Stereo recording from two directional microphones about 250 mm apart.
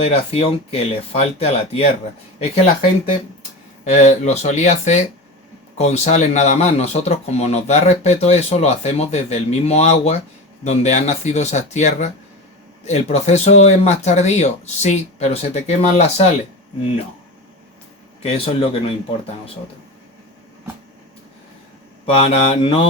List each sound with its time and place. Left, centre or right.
0.0 s speech: left
3.8 s speech: left
18.2 s speech: left
22.0 s speech: left